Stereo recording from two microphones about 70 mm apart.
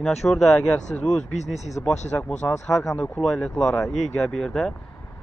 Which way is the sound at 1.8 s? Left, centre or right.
Left.